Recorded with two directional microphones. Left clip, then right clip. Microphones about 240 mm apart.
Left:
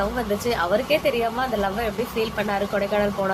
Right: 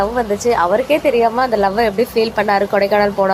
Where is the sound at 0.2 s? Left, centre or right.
Centre.